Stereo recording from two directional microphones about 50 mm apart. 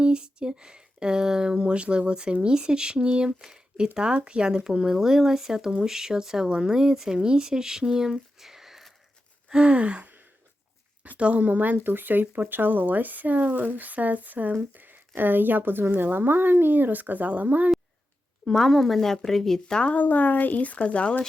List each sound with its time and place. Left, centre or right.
0.0 s speech: centre
3.4 s a sound: centre
3.9 s speech: centre
9.5 s gasp: right
11.2 s gasp: right
11.4 s speech: right
18.4 s speech: centre
19.9 s speech: left